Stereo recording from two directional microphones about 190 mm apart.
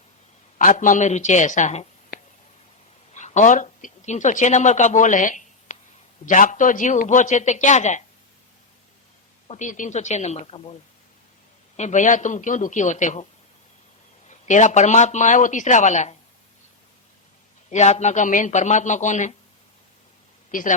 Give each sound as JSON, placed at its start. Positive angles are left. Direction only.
{"t": 0.6, "sound": "speech", "side_deg": 45}
{"t": 3.1, "sound": "speech", "side_deg": 35}
{"t": 9.5, "sound": "speech", "side_deg": 40}
{"t": 11.8, "sound": "speech", "side_deg": 40}
{"t": 14.3, "sound": "speech", "side_deg": 40}
{"t": 17.7, "sound": "speech", "side_deg": 40}
{"t": 20.5, "sound": "a woman's voice", "side_deg": 45}